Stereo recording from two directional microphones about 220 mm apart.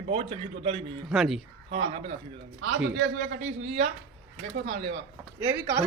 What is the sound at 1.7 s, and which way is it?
Speech, 25° right (ahead or behind).